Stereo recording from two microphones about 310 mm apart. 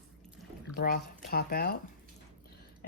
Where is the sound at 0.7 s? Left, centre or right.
Left.